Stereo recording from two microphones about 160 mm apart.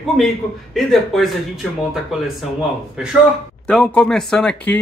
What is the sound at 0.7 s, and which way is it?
Speech, centre (ahead or behind).